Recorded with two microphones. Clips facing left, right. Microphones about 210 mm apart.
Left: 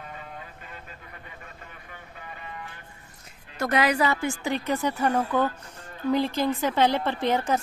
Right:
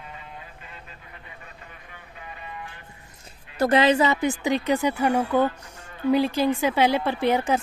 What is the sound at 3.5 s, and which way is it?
A woman's voice, 30° right (ahead or behind).